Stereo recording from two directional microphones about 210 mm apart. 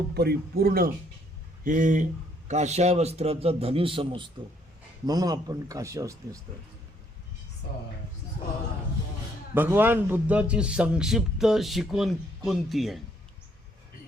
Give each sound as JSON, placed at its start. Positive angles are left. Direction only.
{"t": 0.1, "sound": "a man's voice", "side_deg": -50}
{"t": 9.6, "sound": "a man's voice", "side_deg": -10}